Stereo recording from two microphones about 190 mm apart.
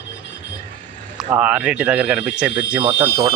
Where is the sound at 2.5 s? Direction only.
65° left (ahead or behind).